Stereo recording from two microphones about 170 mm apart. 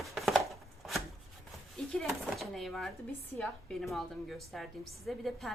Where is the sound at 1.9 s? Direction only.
Centre (ahead or behind).